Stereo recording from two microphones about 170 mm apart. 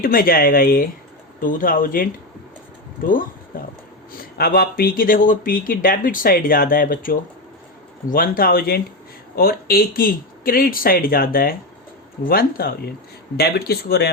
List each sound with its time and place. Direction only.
0.0 s speech: 60° left (ahead or behind)